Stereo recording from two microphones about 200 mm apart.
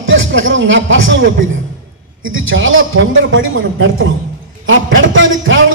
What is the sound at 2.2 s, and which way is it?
Speech, 80° right.